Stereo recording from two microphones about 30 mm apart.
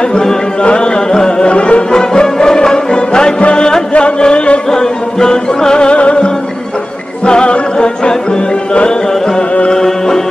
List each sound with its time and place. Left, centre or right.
0.1 s chant: centre
0.6 s music: left
1.5 s music: left
1.9 s music: left
3.3 s music: left
4.6 s music: left
5.9 s music: left
7.7 s music: left
9.7 s music: centre